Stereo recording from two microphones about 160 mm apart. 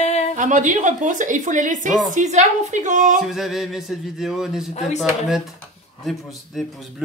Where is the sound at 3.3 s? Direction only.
Centre (ahead or behind).